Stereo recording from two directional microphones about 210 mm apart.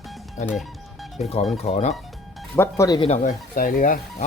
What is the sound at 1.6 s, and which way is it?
Speech, 30° left (ahead or behind).